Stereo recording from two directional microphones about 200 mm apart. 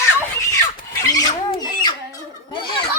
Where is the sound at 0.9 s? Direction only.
15° left (ahead or behind).